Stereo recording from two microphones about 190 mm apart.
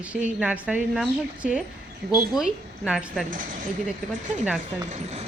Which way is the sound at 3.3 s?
45° right (ahead or behind).